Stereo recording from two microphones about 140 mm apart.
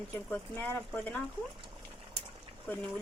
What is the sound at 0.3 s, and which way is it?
Speech, 15° left (ahead or behind).